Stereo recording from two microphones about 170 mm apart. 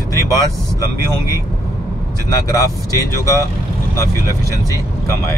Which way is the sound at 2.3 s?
20° left (ahead or behind).